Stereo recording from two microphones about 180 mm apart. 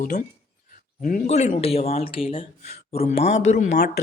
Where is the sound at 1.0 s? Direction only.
45° left (ahead or behind).